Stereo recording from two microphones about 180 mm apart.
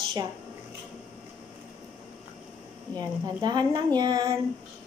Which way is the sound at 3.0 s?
25° right (ahead or behind).